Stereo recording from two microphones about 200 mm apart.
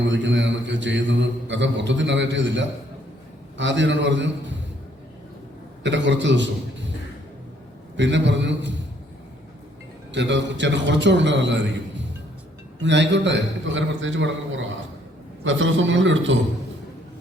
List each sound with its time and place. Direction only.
0.0 s mantra: 65° right (ahead or behind)
5.8 s a man's voice: 65° right (ahead or behind)
7.9 s mantra: 65° right (ahead or behind)
10.1 s mantra: 65° right (ahead or behind)
12.8 s a man's voice: 65° right (ahead or behind)